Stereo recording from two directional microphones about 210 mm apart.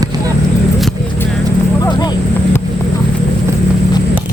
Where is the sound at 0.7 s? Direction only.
Centre (ahead or behind).